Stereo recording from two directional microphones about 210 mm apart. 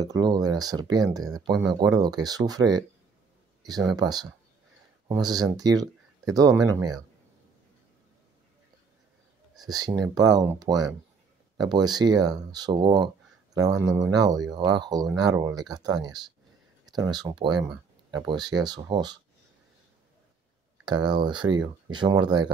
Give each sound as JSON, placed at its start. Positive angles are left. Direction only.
{"t": 0.0, "sound": "speech", "side_deg": -20}
{"t": 9.6, "sound": "speech", "side_deg": -20}
{"t": 20.8, "sound": "speech", "side_deg": -20}